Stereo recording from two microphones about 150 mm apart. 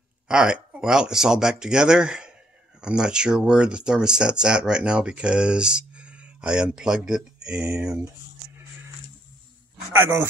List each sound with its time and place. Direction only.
0.3 s speech: 5° right (ahead or behind)
9.9 s speech: 15° right (ahead or behind)